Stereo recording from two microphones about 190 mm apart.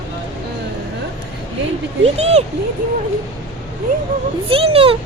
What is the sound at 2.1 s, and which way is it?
Speech, 35° right (ahead or behind).